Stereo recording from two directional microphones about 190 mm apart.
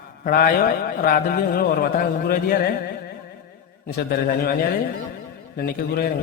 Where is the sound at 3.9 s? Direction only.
50° left (ahead or behind).